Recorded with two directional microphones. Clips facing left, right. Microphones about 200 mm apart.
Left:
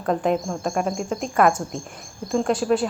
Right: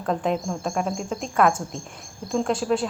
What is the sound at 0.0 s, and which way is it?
A woman's voice, centre (ahead or behind).